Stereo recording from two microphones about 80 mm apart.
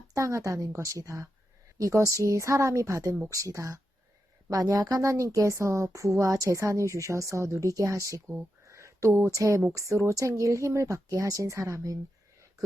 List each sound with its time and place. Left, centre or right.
0.1 s a woman's voice: right